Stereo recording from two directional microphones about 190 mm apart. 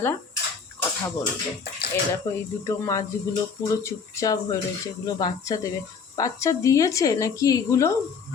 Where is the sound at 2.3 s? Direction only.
15° left (ahead or behind).